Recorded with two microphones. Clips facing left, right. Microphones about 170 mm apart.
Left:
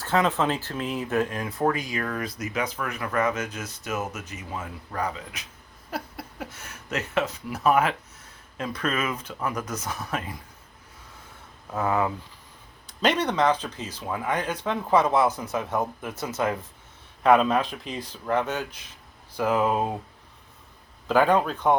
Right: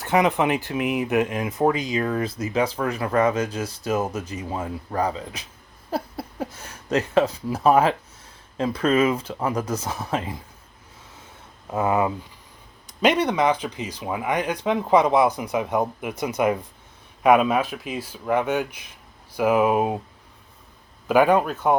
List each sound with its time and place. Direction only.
0.0 s speech: 15° right (ahead or behind)
11.7 s speech: 20° right (ahead or behind)
21.1 s speech: 10° right (ahead or behind)